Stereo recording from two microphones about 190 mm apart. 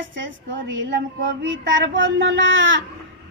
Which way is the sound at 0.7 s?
80° right.